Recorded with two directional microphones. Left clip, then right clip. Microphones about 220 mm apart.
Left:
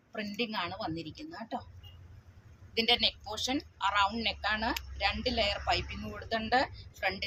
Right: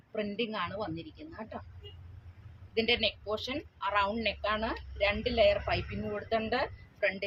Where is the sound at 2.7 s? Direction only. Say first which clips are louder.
Left 1 dB; 15° right (ahead or behind).